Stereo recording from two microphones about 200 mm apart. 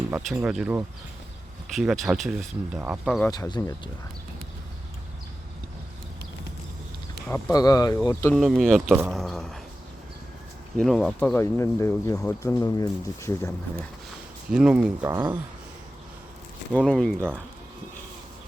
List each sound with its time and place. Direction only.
0.4 s speech: 5° right (ahead or behind)
3.2 s speech: 15° left (ahead or behind)
7.3 s speech: 5° left (ahead or behind)
7.5 s speech: 20° left (ahead or behind)
8.4 s speech: centre (ahead or behind)
10.8 s speech: 5° left (ahead or behind)
14.5 s speech: 5° right (ahead or behind)
16.7 s speech: 5° left (ahead or behind)